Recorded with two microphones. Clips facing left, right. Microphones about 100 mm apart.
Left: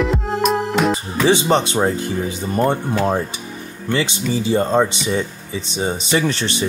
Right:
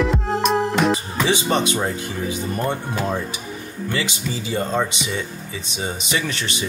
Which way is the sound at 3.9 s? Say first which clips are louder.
Left 7 dB; 30° left (ahead or behind).